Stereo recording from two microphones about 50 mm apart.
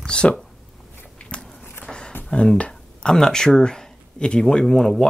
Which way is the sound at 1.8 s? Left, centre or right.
Centre.